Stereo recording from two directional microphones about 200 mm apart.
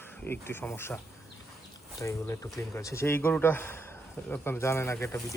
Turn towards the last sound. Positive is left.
turn(degrees=15)  # may be behind; listen again after turning